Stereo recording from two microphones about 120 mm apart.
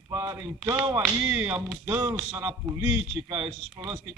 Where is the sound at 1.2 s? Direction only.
20° right (ahead or behind).